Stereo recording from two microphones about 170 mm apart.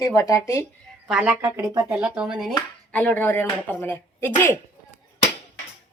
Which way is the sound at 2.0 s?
5° right (ahead or behind).